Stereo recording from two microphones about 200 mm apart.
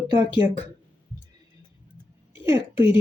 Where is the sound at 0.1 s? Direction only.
25° left (ahead or behind).